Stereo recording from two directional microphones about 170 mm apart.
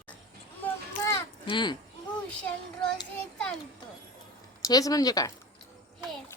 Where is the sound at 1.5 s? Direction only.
25° left (ahead or behind).